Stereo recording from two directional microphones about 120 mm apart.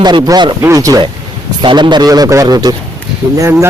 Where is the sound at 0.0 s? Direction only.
40° right (ahead or behind).